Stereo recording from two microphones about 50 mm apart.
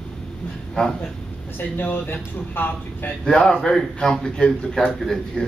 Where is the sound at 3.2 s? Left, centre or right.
Centre.